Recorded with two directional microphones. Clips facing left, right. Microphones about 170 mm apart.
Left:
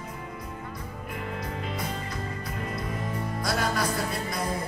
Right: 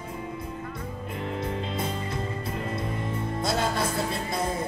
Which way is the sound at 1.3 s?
25° right (ahead or behind).